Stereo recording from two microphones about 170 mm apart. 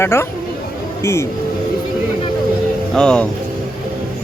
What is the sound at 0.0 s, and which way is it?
Speech, 15° left (ahead or behind).